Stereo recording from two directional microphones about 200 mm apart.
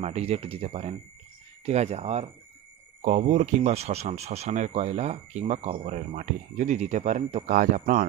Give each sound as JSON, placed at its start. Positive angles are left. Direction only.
{"t": 0.0, "sound": "speech", "side_deg": -30}